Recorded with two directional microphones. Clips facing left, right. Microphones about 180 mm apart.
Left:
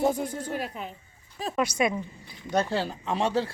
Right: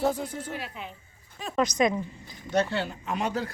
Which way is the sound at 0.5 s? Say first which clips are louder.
Left 4 dB; 45° left (ahead or behind).